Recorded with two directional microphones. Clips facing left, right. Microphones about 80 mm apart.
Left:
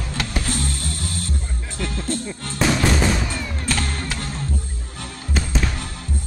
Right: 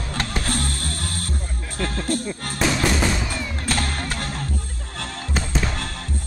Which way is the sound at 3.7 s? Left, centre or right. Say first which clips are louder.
Even; right.